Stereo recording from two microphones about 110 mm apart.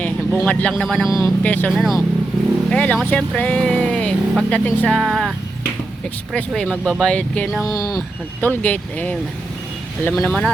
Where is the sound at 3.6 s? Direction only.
10° left (ahead or behind).